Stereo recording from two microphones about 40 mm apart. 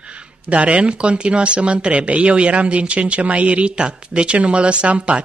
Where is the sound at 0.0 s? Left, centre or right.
Right.